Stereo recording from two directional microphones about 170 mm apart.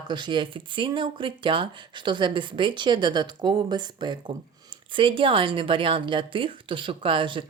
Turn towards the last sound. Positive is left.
turn(degrees=-30)  # may be behind; listen again after turning